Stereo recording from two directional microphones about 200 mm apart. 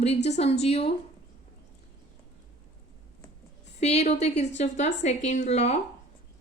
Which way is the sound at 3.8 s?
35° left (ahead or behind).